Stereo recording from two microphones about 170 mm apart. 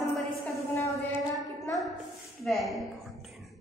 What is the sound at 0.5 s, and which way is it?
Speech, 15° left (ahead or behind).